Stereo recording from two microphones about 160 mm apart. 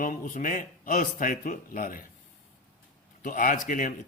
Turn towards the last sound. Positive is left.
turn(degrees=55)  # may be behind; listen again after turning